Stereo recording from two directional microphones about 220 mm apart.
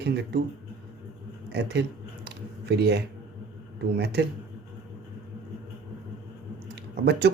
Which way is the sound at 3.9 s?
50° right (ahead or behind).